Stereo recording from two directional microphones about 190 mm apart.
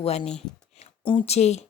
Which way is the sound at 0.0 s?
30° left (ahead or behind).